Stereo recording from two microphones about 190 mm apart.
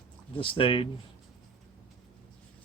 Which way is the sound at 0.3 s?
30° left (ahead or behind).